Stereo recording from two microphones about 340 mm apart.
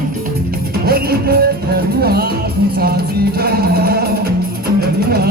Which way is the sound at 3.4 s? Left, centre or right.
Right.